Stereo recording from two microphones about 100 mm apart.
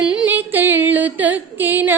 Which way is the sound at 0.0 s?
10° right (ahead or behind).